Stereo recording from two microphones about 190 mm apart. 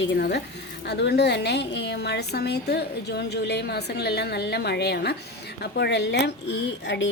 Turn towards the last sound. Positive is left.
turn(degrees=65)  # may be behind; listen again after turning